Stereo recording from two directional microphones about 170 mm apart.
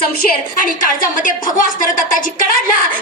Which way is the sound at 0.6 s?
50° left (ahead or behind).